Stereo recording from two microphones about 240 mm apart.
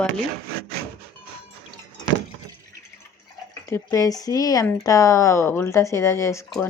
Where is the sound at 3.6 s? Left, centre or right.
Centre.